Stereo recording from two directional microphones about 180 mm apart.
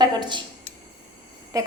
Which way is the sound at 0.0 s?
25° right (ahead or behind).